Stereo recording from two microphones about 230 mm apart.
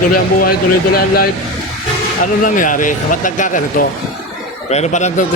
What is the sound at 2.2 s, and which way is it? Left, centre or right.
Speech, left.